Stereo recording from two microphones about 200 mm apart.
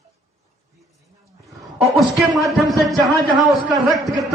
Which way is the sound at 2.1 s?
Centre (ahead or behind).